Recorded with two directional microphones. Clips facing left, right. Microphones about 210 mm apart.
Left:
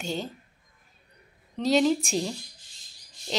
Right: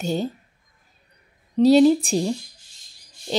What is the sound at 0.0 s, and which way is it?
Speech, 40° right (ahead or behind).